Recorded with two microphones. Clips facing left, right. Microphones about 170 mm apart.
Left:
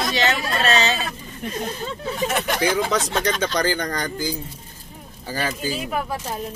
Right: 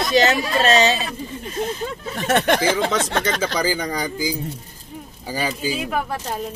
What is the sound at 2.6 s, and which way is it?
Speech, centre (ahead or behind).